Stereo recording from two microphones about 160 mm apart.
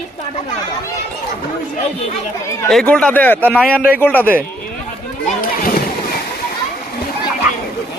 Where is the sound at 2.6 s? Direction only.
5° left (ahead or behind).